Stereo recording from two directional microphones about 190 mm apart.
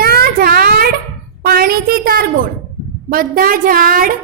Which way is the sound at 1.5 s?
50° right (ahead or behind).